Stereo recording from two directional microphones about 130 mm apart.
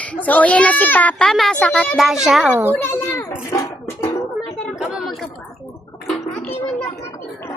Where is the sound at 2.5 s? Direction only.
20° right (ahead or behind).